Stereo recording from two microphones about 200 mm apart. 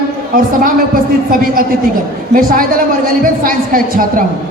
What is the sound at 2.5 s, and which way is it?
A woman's voice, 45° right (ahead or behind).